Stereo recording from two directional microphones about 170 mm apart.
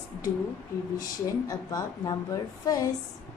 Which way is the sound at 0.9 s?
20° left (ahead or behind).